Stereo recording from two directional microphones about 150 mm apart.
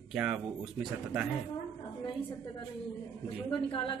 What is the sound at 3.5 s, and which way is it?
Speech, 35° left (ahead or behind).